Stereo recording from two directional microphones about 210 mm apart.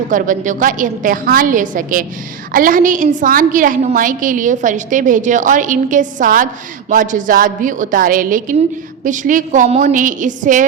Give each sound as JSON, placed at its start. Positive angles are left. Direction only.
{"t": 0.1, "sound": "a woman's voice", "side_deg": -40}